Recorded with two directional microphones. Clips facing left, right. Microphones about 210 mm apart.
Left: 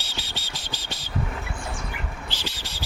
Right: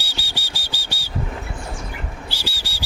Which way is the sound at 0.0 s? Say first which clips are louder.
Right 2 dB; 10° right (ahead or behind).